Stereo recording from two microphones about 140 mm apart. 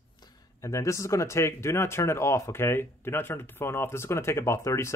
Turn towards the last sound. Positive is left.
turn(degrees=20)  # may be behind; listen again after turning